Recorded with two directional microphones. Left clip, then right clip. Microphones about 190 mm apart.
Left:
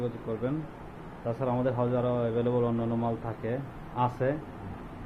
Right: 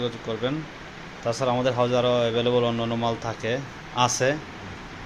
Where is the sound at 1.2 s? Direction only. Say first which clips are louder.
Right 6 dB; 10° right (ahead or behind).